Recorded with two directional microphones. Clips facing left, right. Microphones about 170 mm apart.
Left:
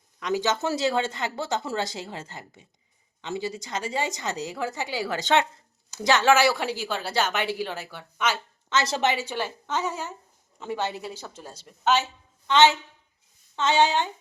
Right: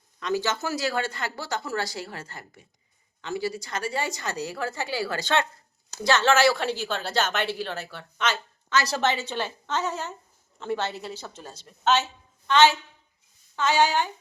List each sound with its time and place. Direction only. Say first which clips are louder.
0.2 s a woman's voice: left 2 dB; 15° left (ahead or behind)
8.7 s a woman's voice: even; 20° left (ahead or behind)